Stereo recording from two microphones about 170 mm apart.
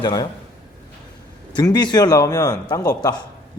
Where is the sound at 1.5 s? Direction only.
25° left (ahead or behind).